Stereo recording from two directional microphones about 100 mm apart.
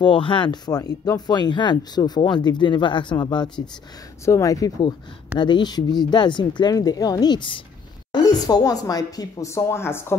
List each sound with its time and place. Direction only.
0.0 s speech: 55° left (ahead or behind)
4.2 s speech: 30° left (ahead or behind)
5.4 s speech: 45° left (ahead or behind)
8.1 s speech: 45° left (ahead or behind); by 10.1 s 25° left (ahead or behind)